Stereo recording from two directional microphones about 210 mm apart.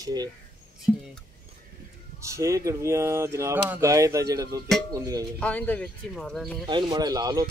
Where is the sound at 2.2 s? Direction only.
15° right (ahead or behind).